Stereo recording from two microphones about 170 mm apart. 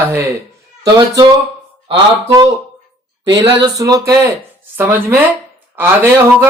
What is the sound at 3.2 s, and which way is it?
Speech, 30° right (ahead or behind).